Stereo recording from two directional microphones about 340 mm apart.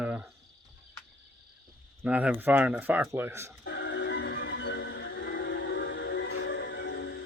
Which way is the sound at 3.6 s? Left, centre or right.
Left.